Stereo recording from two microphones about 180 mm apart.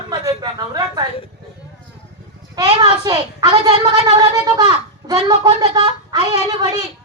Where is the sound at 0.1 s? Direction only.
20° right (ahead or behind).